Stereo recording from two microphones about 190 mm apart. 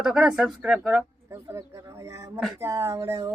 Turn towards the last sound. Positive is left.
turn(degrees=-15)  # may be behind; listen again after turning